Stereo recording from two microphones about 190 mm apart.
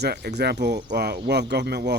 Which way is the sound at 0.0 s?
60° right (ahead or behind).